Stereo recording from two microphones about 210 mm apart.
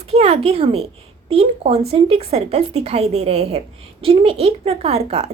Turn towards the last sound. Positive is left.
turn(degrees=-30)  # may be behind; listen again after turning